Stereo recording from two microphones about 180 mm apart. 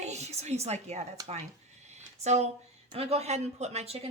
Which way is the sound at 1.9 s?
40° right (ahead or behind).